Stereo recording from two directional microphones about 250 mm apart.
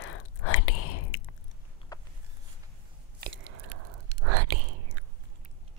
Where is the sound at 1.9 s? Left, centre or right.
Centre.